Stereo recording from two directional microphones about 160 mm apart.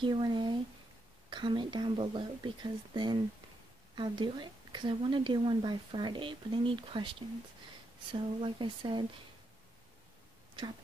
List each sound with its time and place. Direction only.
0.0 s a woman's voice: 30° right (ahead or behind)